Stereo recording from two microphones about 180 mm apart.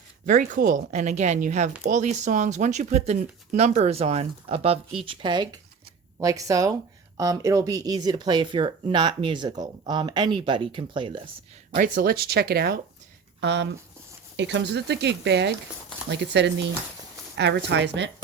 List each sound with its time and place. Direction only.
0.3 s speech: 45° right (ahead or behind); by 11.2 s 30° right (ahead or behind)
11.7 s speech: 50° right (ahead or behind)
13.4 s speech: 75° right (ahead or behind)